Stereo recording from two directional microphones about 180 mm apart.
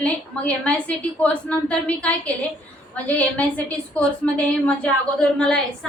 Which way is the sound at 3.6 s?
5° left (ahead or behind).